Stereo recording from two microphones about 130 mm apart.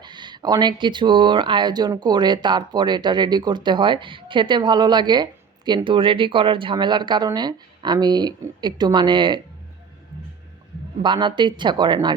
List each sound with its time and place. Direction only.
0.0 s speech: 35° right (ahead or behind)
11.0 s speech: 35° right (ahead or behind)